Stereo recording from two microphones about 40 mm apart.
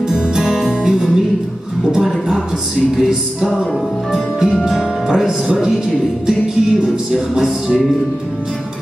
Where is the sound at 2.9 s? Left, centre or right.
Centre.